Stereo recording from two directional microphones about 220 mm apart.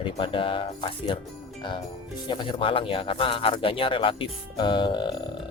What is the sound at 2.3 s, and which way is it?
Speech, 20° left (ahead or behind).